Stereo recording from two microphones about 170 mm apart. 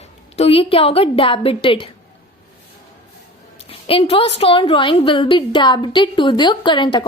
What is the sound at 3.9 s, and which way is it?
A woman's voice, 35° left (ahead or behind).